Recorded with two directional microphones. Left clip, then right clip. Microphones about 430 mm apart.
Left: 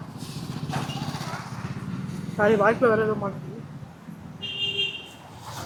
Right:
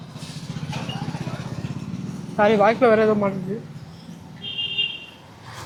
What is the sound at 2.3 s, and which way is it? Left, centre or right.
Speech, centre.